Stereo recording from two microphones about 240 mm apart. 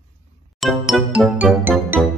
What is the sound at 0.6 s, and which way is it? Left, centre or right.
Music, centre.